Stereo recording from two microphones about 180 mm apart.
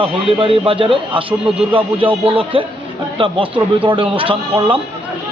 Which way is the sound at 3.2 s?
30° right (ahead or behind).